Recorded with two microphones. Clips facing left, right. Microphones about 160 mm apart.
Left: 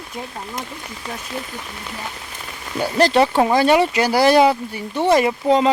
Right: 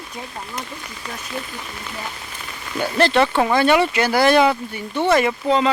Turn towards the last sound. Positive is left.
turn(degrees=40)  # may be behind; listen again after turning